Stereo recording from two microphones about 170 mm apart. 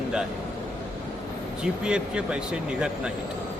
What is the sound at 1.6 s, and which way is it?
Speech, 5° right (ahead or behind).